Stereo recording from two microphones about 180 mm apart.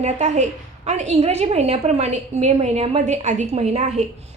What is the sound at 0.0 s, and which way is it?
A woman's voice, 40° right (ahead or behind).